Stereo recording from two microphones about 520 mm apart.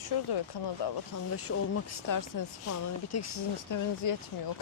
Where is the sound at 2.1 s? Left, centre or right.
Left.